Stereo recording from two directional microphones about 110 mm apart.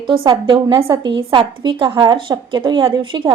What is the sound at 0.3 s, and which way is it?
A woman's voice, 50° right (ahead or behind).